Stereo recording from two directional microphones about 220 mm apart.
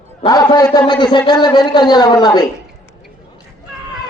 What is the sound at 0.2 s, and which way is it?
A man's voice, 15° left (ahead or behind).